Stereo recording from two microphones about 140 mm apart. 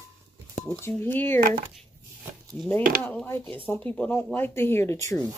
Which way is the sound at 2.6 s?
15° left (ahead or behind).